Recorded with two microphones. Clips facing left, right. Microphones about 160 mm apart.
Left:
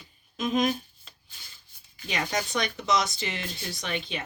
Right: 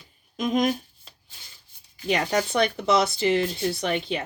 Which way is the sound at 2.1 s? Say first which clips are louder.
Right 6 dB; 35° right (ahead or behind).